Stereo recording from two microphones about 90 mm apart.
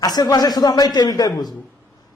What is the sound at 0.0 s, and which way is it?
Speech, 45° left (ahead or behind).